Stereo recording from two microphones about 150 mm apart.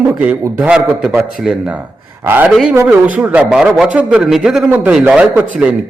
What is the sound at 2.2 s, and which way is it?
A man's voice, 10° right (ahead or behind).